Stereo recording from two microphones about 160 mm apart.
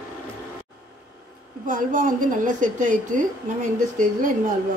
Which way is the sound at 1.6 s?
55° right (ahead or behind).